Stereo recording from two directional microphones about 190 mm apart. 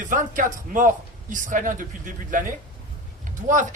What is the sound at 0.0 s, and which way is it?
Speech, 45° right (ahead or behind).